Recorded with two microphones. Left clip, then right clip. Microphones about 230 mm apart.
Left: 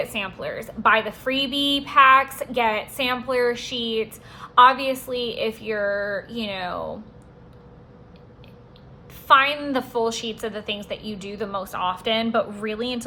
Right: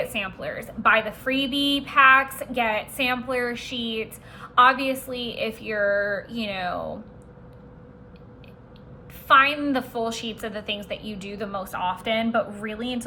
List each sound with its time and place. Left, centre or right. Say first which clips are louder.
0.0 s speech: left 1 dB; centre
9.2 s speech: left 1 dB; centre